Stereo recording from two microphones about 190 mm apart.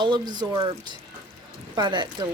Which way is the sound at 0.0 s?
20° right (ahead or behind).